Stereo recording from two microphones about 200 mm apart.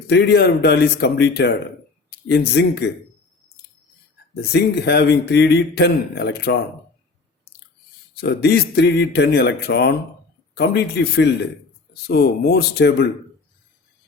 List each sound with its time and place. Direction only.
0.1 s a man's voice: 55° left (ahead or behind)
4.5 s a man's voice: 55° left (ahead or behind)
8.2 s a man's voice: 55° left (ahead or behind)